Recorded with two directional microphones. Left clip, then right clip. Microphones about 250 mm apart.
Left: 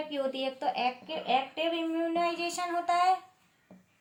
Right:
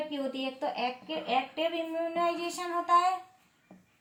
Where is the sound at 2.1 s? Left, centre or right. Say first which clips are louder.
Even; left.